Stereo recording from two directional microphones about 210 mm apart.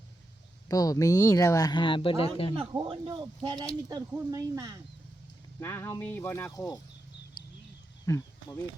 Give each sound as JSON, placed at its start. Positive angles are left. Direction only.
{"t": 0.7, "sound": "speech", "side_deg": 15}
{"t": 2.6, "sound": "speech", "side_deg": -25}
{"t": 5.5, "sound": "speech", "side_deg": 10}
{"t": 8.0, "sound": "speech", "side_deg": 15}